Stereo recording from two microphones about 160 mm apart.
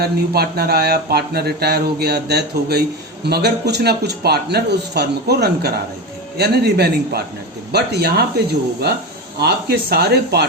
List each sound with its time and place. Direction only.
0.0 s a man's voice: 80° right
9.4 s a man's voice: 90° right